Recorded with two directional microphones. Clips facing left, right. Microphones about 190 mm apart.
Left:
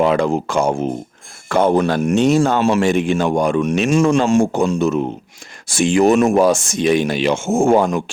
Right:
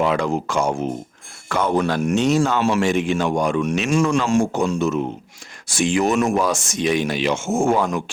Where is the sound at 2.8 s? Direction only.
55° left (ahead or behind).